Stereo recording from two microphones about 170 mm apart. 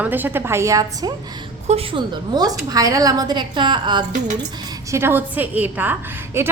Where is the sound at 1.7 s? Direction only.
30° right (ahead or behind).